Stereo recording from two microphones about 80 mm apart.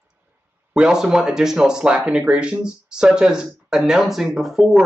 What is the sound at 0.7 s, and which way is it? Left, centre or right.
Speech, centre.